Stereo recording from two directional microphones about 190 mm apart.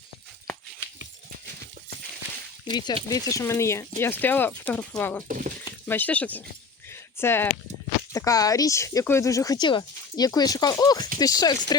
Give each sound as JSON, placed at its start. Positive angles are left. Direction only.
{"t": 2.6, "sound": "speech", "side_deg": 20}
{"t": 6.9, "sound": "a sound", "side_deg": 10}
{"t": 8.1, "sound": "speech", "side_deg": 15}